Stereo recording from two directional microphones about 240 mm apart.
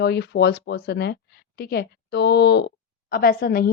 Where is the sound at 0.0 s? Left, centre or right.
Left.